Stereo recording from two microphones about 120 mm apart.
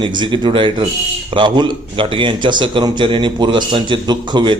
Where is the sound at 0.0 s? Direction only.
40° right (ahead or behind).